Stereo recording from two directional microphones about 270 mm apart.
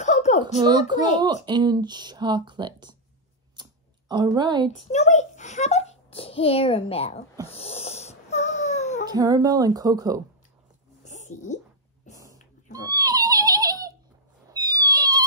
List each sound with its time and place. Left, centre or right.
0.0 s a sound: left
0.6 s speech: centre
4.1 s speech: centre
4.9 s a child's voice: left
7.5 s wheeze: left
9.0 s speech: centre
11.1 s a sound: left
12.1 s whispering: left
12.7 s a sound: centre